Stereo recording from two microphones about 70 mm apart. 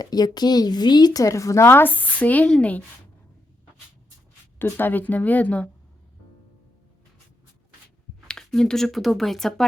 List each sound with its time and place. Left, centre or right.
0.0 s speech: left; by 2.8 s centre
4.6 s speech: left
8.3 s speech: centre